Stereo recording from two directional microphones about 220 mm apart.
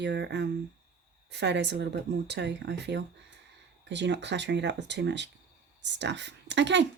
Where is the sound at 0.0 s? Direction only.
50° right (ahead or behind).